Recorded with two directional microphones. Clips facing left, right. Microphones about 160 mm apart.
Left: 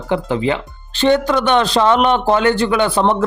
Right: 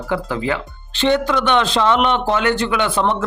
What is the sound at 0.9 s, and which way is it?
A man's voice, 40° left (ahead or behind).